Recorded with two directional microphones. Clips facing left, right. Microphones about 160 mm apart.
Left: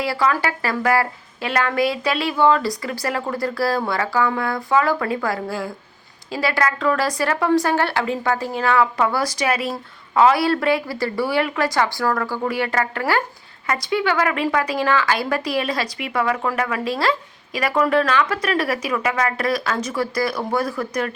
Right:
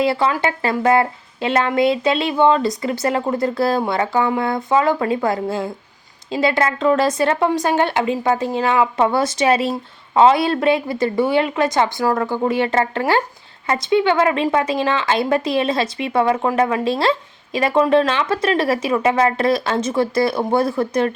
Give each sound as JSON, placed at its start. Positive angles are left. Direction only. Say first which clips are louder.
{"t": 0.0, "sound": "a woman's voice", "louder": "right 3 dB", "side_deg": -25}